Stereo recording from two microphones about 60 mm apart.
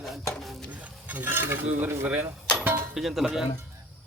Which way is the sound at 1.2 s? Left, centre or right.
Right.